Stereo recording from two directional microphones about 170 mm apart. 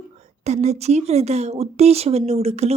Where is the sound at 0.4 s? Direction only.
40° right (ahead or behind).